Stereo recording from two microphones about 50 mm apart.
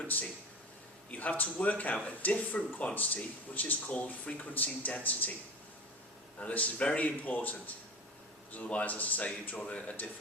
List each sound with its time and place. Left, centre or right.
0.1 s speech: left
6.4 s a man's voice: left
8.5 s speech: left